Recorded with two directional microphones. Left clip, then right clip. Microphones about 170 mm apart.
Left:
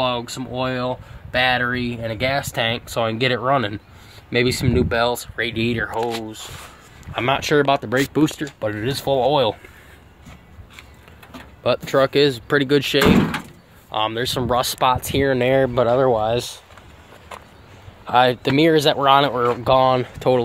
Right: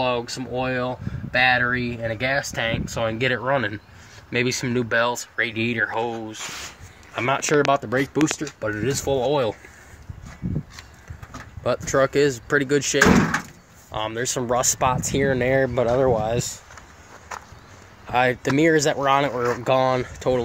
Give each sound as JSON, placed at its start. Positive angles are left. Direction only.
{"t": 0.0, "sound": "speech", "side_deg": 35}
{"t": 5.9, "sound": "speech", "side_deg": 15}
{"t": 7.2, "sound": "speech", "side_deg": 0}
{"t": 11.6, "sound": "speech", "side_deg": 0}
{"t": 18.0, "sound": "speech", "side_deg": 10}
{"t": 19.4, "sound": "speech", "side_deg": -5}
{"t": 20.0, "sound": "speech", "side_deg": 10}